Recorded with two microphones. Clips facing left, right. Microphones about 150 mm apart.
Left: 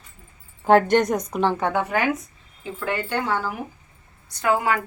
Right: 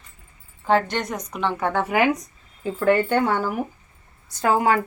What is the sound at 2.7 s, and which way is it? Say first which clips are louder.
Speech: right 7 dB; 50° right (ahead or behind).